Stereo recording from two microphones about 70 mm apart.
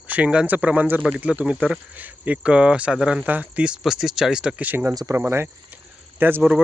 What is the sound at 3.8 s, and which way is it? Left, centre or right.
Speech, centre.